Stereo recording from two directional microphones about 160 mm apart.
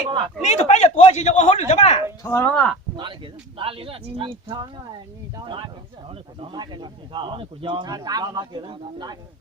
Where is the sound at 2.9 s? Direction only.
30° right (ahead or behind).